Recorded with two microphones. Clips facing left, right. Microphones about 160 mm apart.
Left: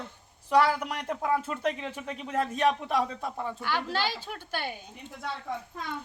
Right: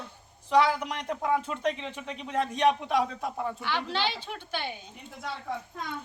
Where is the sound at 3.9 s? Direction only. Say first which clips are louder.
Even; 40° left (ahead or behind).